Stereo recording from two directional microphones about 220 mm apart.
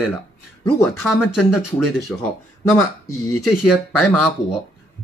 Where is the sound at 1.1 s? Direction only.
Centre (ahead or behind).